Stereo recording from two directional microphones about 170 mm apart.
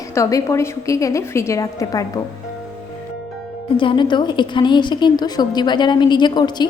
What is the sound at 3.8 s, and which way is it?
A woman's voice, 30° left (ahead or behind).